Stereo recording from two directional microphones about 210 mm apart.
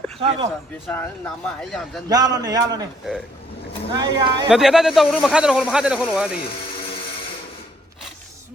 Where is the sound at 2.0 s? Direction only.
15° right (ahead or behind).